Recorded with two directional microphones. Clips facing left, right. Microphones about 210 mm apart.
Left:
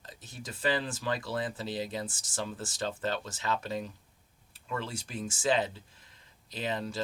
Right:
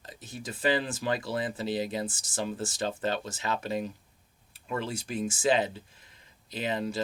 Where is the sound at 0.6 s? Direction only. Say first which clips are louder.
Right 3 dB; 20° right (ahead or behind).